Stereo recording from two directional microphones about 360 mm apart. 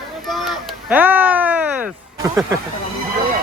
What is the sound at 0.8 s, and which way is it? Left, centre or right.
Speech, centre.